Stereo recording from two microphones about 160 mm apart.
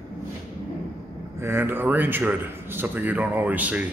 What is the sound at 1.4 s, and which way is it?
Speech, 15° right (ahead or behind).